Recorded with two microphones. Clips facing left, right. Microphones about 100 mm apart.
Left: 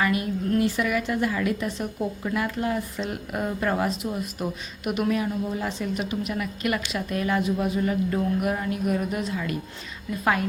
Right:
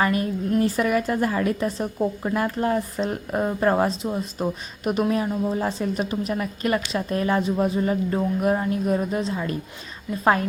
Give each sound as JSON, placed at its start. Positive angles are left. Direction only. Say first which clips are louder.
{"t": 0.0, "sound": "a woman's voice", "louder": "right 2 dB", "side_deg": -40}